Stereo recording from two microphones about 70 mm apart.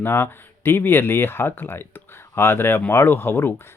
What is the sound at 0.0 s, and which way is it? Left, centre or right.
Speech, left.